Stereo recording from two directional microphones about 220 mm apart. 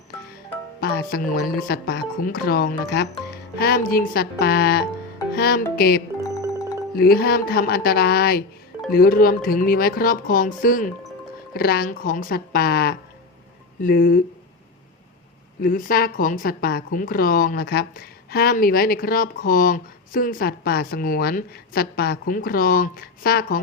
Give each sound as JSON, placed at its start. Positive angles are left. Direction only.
{"t": 0.8, "sound": "music", "side_deg": 40}
{"t": 1.3, "sound": "a woman's voice", "side_deg": 40}
{"t": 15.6, "sound": "a woman's voice", "side_deg": 40}